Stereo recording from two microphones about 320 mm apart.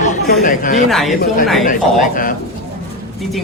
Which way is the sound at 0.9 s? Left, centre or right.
Centre.